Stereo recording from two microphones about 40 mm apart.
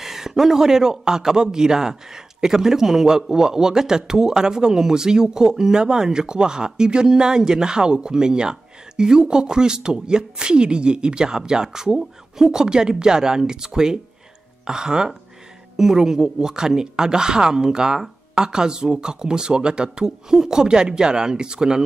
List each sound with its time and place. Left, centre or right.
0.0 s a man's voice: centre